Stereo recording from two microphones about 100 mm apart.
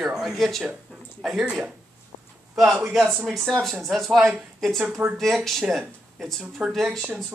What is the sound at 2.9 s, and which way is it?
Speech, centre (ahead or behind).